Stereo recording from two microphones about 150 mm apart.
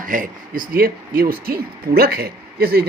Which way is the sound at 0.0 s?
65° right (ahead or behind).